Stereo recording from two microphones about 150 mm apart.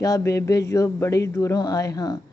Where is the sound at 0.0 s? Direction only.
20° left (ahead or behind).